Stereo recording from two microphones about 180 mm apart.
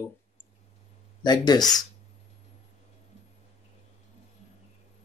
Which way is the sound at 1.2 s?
20° left (ahead or behind).